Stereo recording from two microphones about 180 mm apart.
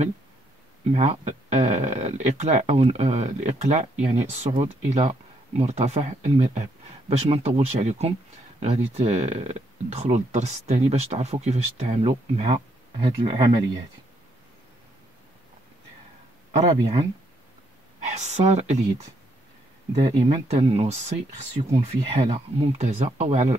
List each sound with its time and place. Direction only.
0.9 s speech: 35° right (ahead or behind)
5.6 s speech: 35° right (ahead or behind)
16.5 s speech: 35° right (ahead or behind)
18.0 s speech: 40° right (ahead or behind)
20.0 s speech: 30° right (ahead or behind)